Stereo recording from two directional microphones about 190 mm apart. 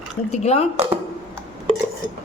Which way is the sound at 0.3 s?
35° left (ahead or behind).